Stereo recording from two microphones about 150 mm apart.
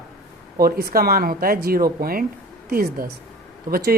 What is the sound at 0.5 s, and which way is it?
Speech, 85° right.